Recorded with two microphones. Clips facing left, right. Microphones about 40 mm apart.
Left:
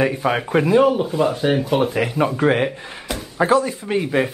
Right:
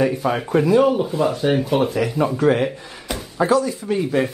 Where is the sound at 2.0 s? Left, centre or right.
Left.